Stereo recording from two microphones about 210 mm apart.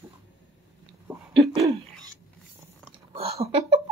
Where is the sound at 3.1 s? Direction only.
30° right (ahead or behind).